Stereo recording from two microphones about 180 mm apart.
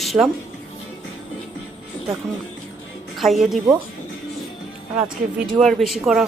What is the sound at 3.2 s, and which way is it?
Speech, centre (ahead or behind).